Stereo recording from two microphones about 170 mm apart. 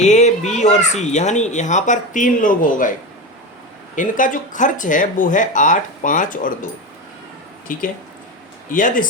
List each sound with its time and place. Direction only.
0.0 s speech: 40° left (ahead or behind)
3.9 s speech: 50° left (ahead or behind)
7.7 s speech: 50° left (ahead or behind)